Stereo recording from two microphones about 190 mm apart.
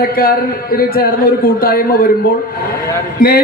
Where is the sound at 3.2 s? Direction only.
50° left (ahead or behind).